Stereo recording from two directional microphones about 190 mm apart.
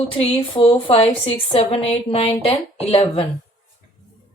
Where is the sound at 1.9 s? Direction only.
30° left (ahead or behind).